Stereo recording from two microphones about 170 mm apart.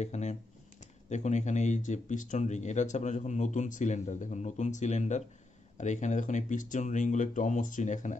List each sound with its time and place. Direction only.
0.0 s speech: 40° left (ahead or behind)